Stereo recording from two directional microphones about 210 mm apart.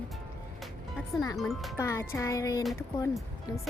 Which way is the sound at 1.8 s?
15° left (ahead or behind).